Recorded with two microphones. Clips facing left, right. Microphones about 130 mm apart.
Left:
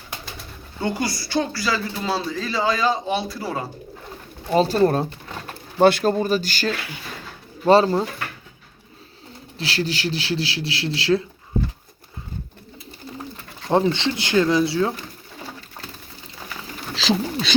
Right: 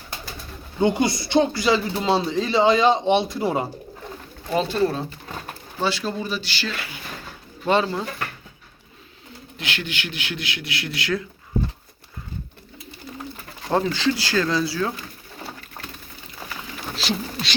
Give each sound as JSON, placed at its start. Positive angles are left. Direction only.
{"t": 0.8, "sound": "speech", "side_deg": -20}
{"t": 4.5, "sound": "speech", "side_deg": 30}
{"t": 4.8, "sound": "speech", "side_deg": 50}
{"t": 9.6, "sound": "speech", "side_deg": 35}
{"t": 13.7, "sound": "speech", "side_deg": 25}
{"t": 17.0, "sound": "a sound", "side_deg": 90}